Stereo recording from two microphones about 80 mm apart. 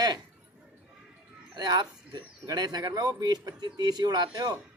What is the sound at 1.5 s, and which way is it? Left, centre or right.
A man's voice, right.